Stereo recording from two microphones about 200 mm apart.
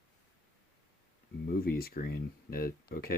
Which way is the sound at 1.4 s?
50° left (ahead or behind).